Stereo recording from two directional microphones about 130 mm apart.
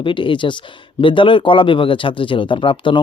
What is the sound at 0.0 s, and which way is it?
Speech, 40° left (ahead or behind).